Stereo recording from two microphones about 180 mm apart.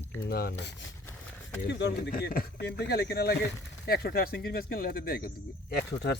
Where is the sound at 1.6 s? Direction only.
75° left (ahead or behind).